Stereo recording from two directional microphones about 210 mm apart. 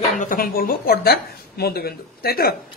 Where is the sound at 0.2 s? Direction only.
40° left (ahead or behind).